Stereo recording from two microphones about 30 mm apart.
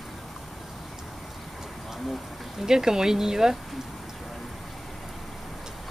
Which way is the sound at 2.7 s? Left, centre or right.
Centre.